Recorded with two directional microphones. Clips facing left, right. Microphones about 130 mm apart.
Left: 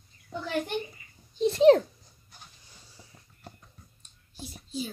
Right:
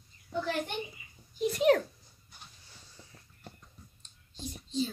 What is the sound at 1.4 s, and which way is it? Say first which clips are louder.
Speech: left 7 dB; 30° left (ahead or behind).